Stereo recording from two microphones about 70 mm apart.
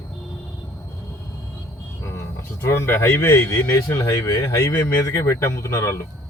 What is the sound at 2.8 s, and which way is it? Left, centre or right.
Speech, left.